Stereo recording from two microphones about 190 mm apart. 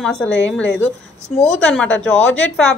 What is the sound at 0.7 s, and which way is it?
Speech, 80° left.